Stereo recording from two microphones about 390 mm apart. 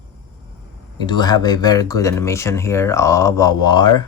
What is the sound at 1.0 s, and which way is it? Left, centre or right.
Speech, centre.